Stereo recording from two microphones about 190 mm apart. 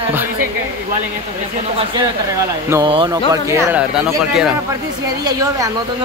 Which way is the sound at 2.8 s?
25° right (ahead or behind).